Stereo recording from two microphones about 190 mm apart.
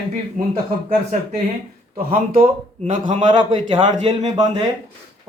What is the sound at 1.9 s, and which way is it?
Speech, 45° right (ahead or behind).